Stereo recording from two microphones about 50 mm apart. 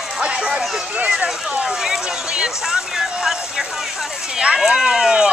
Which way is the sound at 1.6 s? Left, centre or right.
Centre.